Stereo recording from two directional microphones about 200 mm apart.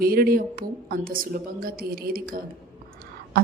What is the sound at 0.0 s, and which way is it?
A woman's voice, 50° right (ahead or behind).